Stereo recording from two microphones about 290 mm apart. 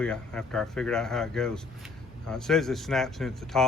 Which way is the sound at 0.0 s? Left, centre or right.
Centre.